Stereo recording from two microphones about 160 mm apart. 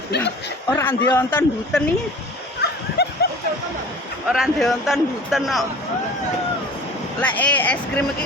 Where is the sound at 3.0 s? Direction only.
90° left.